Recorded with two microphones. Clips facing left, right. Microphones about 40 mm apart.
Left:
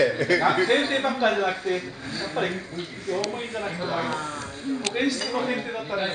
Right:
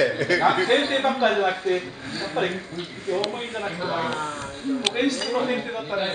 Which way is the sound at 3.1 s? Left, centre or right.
Right.